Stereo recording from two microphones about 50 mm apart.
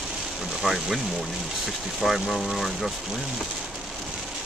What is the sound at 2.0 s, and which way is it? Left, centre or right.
Speech, centre.